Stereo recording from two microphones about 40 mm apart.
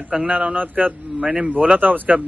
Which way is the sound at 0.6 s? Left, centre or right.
Right.